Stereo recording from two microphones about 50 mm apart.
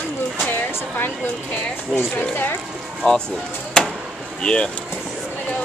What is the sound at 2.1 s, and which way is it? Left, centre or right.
Speech, left.